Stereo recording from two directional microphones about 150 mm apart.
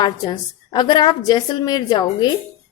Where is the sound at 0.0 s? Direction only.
25° left (ahead or behind).